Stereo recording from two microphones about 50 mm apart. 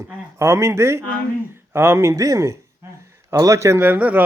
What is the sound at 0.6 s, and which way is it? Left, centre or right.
Speech, right.